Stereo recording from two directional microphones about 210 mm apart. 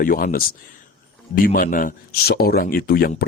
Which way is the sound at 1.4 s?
40° left (ahead or behind).